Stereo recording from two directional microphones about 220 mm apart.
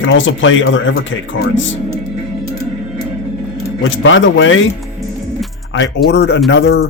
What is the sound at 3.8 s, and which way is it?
Speech, 60° left (ahead or behind).